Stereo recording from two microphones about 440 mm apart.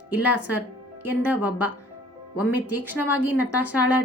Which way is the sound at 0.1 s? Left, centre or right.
Centre.